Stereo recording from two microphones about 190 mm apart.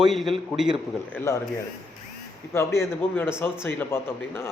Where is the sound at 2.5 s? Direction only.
15° left (ahead or behind).